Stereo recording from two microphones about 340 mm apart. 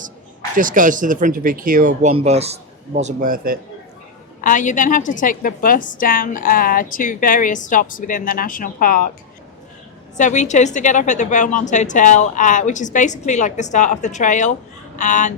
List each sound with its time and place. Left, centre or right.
0.5 s speech: right
4.4 s a woman's voice: left
10.2 s a woman's voice: left